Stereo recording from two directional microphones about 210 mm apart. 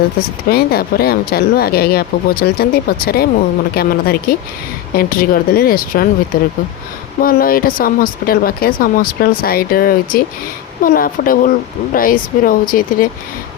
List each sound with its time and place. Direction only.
0.5 s speech: 45° left (ahead or behind)
7.2 s speech: 45° left (ahead or behind)